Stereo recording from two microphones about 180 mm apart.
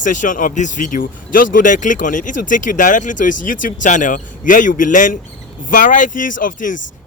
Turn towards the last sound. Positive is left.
turn(degrees=45)  # may be behind; listen again after turning